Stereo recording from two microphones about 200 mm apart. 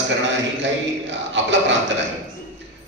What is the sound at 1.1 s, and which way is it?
Speech, 65° right (ahead or behind).